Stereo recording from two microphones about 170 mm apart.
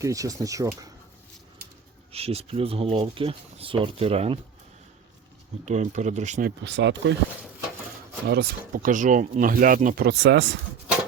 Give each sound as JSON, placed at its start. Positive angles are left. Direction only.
{"t": 0.0, "sound": "speech", "side_deg": -20}
{"t": 2.1, "sound": "speech", "side_deg": -35}
{"t": 5.6, "sound": "speech", "side_deg": -45}
{"t": 6.7, "sound": "speech", "side_deg": -90}
{"t": 8.3, "sound": "speech", "side_deg": -60}
{"t": 10.1, "sound": "speech", "side_deg": -90}